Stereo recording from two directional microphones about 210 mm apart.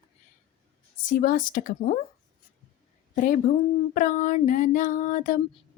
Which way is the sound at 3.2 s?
40° left (ahead or behind).